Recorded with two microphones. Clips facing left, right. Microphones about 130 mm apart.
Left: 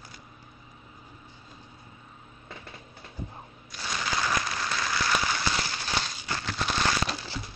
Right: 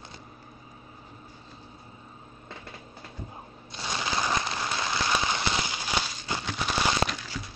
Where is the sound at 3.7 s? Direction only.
25° right (ahead or behind).